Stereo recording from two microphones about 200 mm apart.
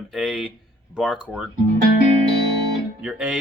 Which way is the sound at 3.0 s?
5° right (ahead or behind).